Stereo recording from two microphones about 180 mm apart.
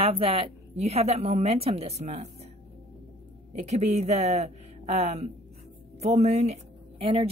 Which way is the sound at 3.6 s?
40° right (ahead or behind).